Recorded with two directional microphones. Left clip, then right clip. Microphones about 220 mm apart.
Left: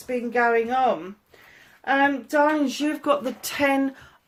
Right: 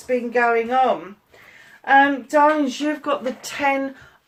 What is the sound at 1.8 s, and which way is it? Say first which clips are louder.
Speech: right 6 dB; 40° left (ahead or behind).